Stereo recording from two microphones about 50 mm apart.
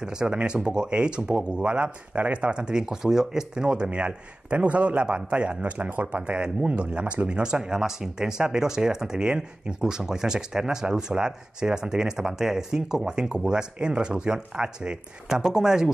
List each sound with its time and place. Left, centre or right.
0.0 s speech: centre